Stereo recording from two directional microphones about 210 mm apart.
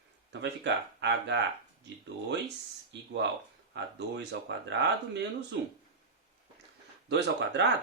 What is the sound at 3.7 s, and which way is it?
Speech, 55° right (ahead or behind).